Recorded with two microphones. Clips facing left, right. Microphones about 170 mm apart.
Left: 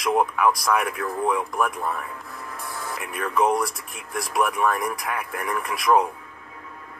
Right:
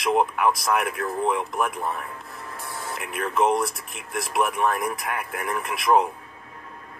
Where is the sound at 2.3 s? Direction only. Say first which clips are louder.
Left 1 dB; 25° right (ahead or behind).